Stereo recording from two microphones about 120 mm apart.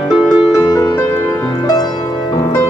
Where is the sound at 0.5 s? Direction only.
30° left (ahead or behind).